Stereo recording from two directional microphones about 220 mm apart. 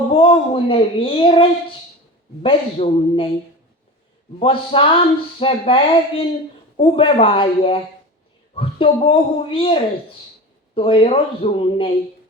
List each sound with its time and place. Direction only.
0.1 s speech: 25° left (ahead or behind)
4.4 s speech: 25° left (ahead or behind)